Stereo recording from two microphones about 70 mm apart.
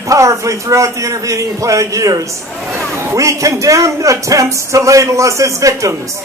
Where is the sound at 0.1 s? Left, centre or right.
Right.